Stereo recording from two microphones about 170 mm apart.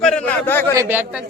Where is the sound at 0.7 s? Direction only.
10° right (ahead or behind).